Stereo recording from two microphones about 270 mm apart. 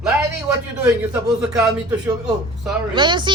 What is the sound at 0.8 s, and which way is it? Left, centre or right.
Speech, centre.